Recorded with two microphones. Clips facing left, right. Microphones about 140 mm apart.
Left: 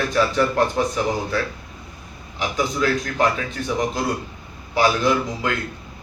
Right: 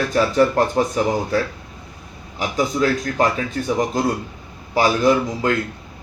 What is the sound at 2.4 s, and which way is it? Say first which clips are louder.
Speech: right 3 dB; 40° right (ahead or behind).